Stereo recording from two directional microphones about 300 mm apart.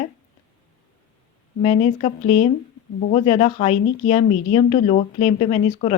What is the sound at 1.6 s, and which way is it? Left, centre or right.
Speech, centre.